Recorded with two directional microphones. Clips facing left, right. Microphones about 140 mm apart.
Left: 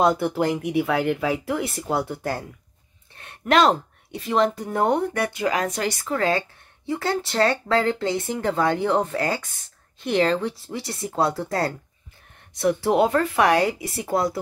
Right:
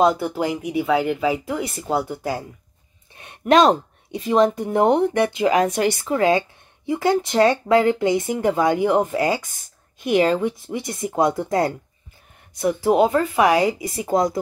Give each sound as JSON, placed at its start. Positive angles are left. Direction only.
{"t": 0.0, "sound": "a woman's voice", "side_deg": 0}
{"t": 3.2, "sound": "a woman's voice", "side_deg": -15}
{"t": 12.5, "sound": "a woman's voice", "side_deg": -5}
{"t": 14.0, "sound": "speech", "side_deg": -15}